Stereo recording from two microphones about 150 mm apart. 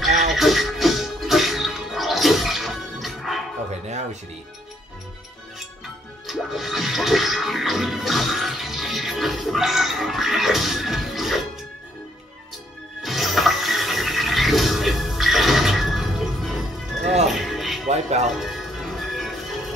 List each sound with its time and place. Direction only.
0.3 s music: centre (ahead or behind)
3.8 s music: 50° right (ahead or behind)
6.2 s music: centre (ahead or behind)
13.0 s toilet flush: centre (ahead or behind)
17.0 s music: 45° right (ahead or behind)
17.3 s music: centre (ahead or behind)
17.8 s music: 45° right (ahead or behind)
18.4 s music: centre (ahead or behind)